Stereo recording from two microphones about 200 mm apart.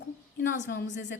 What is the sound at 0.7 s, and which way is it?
Speech, 55° left (ahead or behind).